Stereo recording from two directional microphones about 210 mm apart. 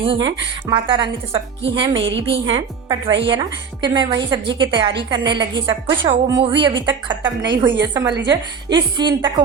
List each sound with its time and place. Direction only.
0.0 s a woman's voice: 25° right (ahead or behind)
2.0 s a woman's voice: 60° right (ahead or behind)
2.5 s a woman's voice: 25° right (ahead or behind)
8.1 s a woman's voice: 55° right (ahead or behind)
8.7 s a woman's voice: 20° right (ahead or behind)